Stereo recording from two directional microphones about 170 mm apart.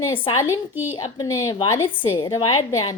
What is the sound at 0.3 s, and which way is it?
A woman's voice, 20° left (ahead or behind).